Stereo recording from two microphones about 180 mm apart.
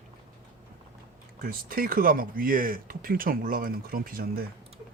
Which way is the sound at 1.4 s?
50° right (ahead or behind).